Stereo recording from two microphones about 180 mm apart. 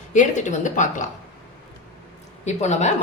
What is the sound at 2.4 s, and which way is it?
Speech, 40° left (ahead or behind).